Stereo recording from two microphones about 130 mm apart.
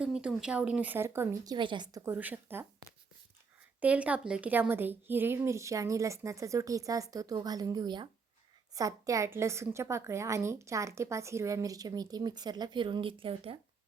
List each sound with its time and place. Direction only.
0.0 s speech: 5° right (ahead or behind)
1.5 s a woman's voice: 35° right (ahead or behind)
2.1 s speech: 15° right (ahead or behind)
3.8 s a woman's voice: 10° right (ahead or behind); by 13.6 s 45° right (ahead or behind)